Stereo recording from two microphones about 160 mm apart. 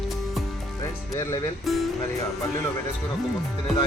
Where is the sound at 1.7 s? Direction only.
Centre (ahead or behind).